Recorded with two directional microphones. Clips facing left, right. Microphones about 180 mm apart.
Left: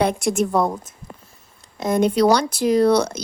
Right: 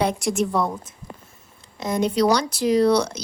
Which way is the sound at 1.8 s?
55° left (ahead or behind).